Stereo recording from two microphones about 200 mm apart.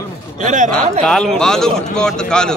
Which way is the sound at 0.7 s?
5° left (ahead or behind).